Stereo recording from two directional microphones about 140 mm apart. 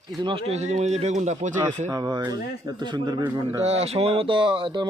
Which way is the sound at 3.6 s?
45° right (ahead or behind).